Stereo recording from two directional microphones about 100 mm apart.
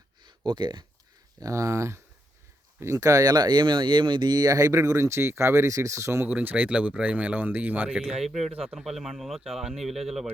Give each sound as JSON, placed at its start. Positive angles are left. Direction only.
{"t": 0.3, "sound": "speech", "side_deg": -50}
{"t": 1.4, "sound": "speech", "side_deg": -30}
{"t": 6.2, "sound": "speech", "side_deg": -15}
{"t": 8.0, "sound": "speech", "side_deg": 0}